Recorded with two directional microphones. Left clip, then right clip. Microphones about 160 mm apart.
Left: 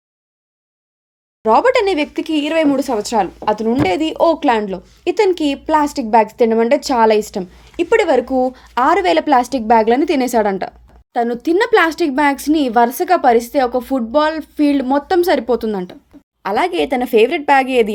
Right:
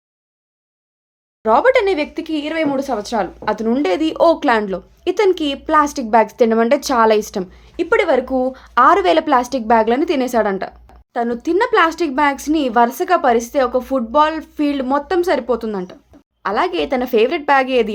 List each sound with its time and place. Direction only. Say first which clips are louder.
1.4 s speech: left 1 dB; 40° left (ahead or behind); by 5.1 s 25° left (ahead or behind)
5.1 s speech: left 1 dB; 35° left (ahead or behind)
7.8 s a woman's voice: left 2 dB; 50° left (ahead or behind)